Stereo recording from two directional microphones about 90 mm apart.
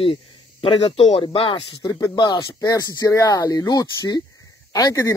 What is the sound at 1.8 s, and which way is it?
Speech, 45° left (ahead or behind).